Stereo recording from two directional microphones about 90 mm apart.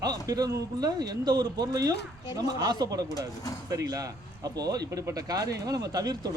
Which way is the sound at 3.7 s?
45° right (ahead or behind).